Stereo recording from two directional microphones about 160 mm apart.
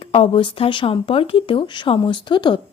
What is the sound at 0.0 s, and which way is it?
A woman's voice, 35° left (ahead or behind).